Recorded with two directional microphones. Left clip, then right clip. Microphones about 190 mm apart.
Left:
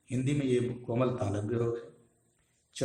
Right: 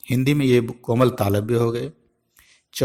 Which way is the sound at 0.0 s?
50° right (ahead or behind).